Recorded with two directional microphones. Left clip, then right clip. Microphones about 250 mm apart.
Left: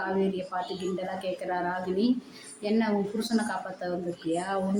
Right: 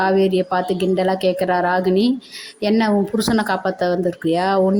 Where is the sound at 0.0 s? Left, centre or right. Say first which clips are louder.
Right 13 dB; right.